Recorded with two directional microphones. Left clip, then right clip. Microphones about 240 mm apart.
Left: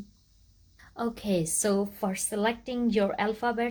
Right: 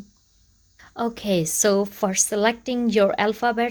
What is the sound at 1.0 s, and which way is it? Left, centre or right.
A woman's voice, right.